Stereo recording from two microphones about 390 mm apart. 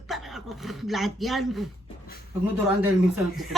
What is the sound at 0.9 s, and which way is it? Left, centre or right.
Speech, centre.